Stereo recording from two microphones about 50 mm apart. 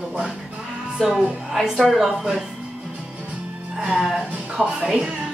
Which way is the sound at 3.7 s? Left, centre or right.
Centre.